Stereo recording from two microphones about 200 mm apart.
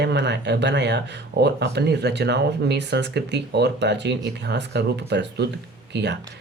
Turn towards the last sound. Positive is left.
turn(degrees=-60)  # may be behind; listen again after turning